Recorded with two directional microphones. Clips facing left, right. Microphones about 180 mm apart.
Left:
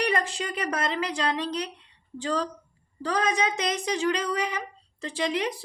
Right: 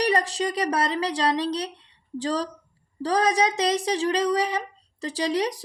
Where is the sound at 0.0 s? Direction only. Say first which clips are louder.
Right 4 dB; 35° right (ahead or behind).